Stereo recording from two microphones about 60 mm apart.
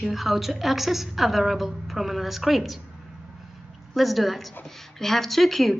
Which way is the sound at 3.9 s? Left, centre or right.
Centre.